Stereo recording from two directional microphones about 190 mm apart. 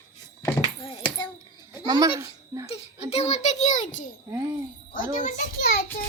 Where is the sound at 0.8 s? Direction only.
25° left (ahead or behind).